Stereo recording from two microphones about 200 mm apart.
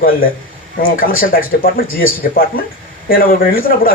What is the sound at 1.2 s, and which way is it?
A man's voice, 45° left (ahead or behind).